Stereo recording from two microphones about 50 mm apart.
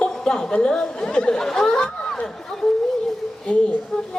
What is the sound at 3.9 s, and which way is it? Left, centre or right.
Speech, centre.